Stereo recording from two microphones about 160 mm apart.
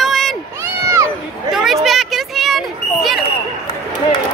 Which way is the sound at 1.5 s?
Centre (ahead or behind).